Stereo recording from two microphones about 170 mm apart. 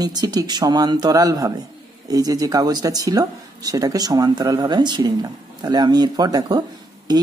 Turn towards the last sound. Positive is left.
turn(degrees=-25)  # may be behind; listen again after turning